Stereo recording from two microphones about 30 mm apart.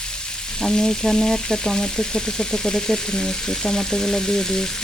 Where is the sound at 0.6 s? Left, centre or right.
Centre.